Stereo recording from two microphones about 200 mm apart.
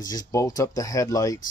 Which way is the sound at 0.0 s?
20° left (ahead or behind).